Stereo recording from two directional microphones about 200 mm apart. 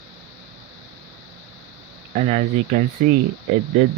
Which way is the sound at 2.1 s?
35° right (ahead or behind).